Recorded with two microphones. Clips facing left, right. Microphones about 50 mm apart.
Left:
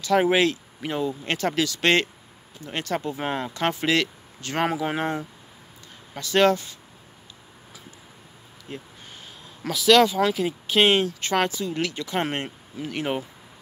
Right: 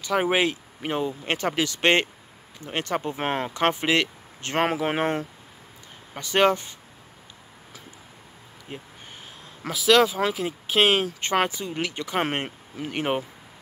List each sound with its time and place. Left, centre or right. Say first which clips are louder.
0.0 s speech: left 3 dB; centre; by 5.2 s right
6.1 s speech: left 1 dB; right
8.7 s speech: left 1 dB; right
9.7 s speech: left 2 dB; centre
11.1 s speech: even; right